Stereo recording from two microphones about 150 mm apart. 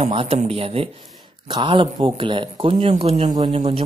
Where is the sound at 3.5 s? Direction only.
40° right (ahead or behind).